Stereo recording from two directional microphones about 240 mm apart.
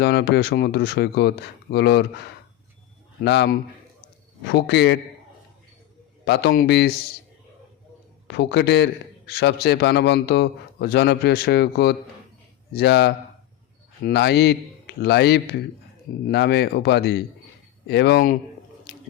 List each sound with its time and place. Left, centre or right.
0.0 s a man's voice: left
6.2 s a man's voice: left
8.3 s a man's voice: left
18.9 s a sound: left